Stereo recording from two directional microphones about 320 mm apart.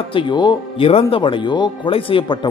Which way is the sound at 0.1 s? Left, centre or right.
Centre.